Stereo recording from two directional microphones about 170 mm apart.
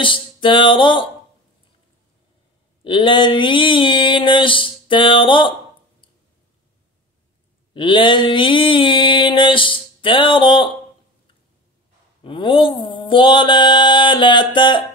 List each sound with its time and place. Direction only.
0.0 s music: 30° left (ahead or behind)
2.8 s a sound: 30° left (ahead or behind)
7.7 s mantra: 30° left (ahead or behind)
12.2 s mantra: 30° left (ahead or behind)